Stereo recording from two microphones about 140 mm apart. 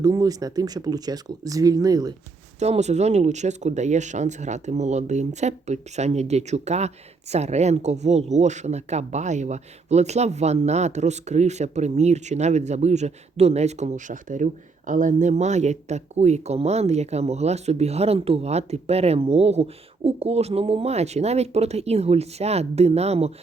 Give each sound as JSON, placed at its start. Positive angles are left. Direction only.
{"t": 0.0, "sound": "speech", "side_deg": -25}
{"t": 2.6, "sound": "speech", "side_deg": -55}